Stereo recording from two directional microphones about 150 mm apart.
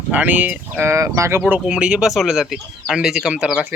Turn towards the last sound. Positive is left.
turn(degrees=-5)  # may be behind; listen again after turning